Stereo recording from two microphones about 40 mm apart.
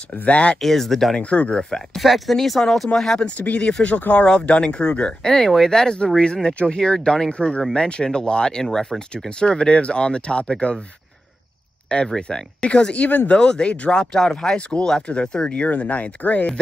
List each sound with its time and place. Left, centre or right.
0.2 s speech: left
0.6 s speech: centre
1.1 s speech: left
2.0 s speech: centre
3.2 s speech: left
5.2 s speech: centre
12.2 s speech: centre
15.7 s speech: left